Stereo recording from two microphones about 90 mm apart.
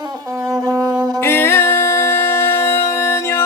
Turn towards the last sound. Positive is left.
turn(degrees=30)  # may be behind; listen again after turning